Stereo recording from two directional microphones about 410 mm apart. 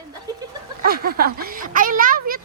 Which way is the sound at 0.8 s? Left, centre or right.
Right.